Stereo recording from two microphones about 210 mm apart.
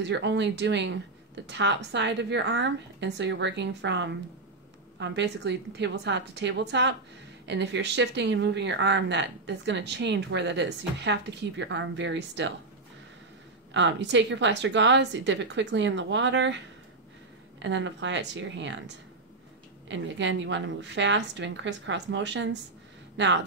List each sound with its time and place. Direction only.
0.0 s speech: 55° right (ahead or behind)
13.7 s speech: 60° right (ahead or behind)
19.9 s speech: 60° right (ahead or behind)